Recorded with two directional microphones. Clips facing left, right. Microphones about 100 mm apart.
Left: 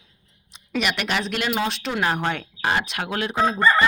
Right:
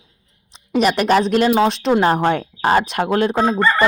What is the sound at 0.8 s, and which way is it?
Speech, 40° right (ahead or behind).